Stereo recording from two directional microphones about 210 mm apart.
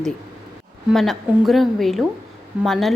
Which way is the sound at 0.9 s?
Centre (ahead or behind).